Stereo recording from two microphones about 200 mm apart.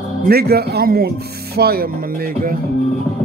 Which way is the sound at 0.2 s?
50° right (ahead or behind).